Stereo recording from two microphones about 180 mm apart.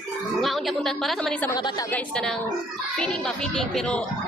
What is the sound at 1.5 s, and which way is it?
Speech, 25° left (ahead or behind).